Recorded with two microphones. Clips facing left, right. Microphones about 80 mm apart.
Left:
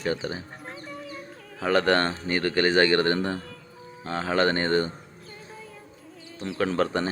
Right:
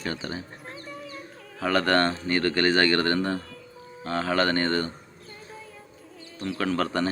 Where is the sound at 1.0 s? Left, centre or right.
Centre.